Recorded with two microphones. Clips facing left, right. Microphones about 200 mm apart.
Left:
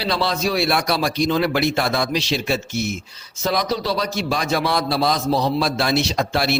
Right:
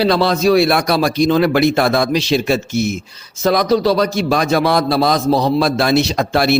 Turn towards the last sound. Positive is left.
turn(degrees=-50)  # may be behind; listen again after turning